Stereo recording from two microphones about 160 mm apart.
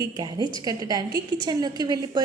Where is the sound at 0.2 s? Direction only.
25° right (ahead or behind).